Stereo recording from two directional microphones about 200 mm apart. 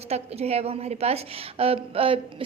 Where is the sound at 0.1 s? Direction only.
30° right (ahead or behind).